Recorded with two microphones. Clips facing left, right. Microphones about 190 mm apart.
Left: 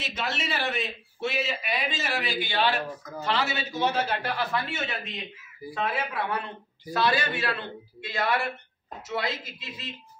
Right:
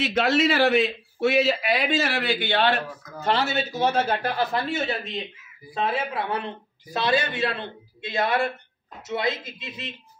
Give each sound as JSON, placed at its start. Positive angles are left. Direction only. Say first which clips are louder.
{"t": 0.0, "sound": "a man's voice", "louder": "right 11 dB", "side_deg": -70}
{"t": 3.3, "sound": "a man's voice", "louder": "right 5 dB", "side_deg": -45}
{"t": 5.8, "sound": "a man's voice", "louder": "right 3 dB", "side_deg": -25}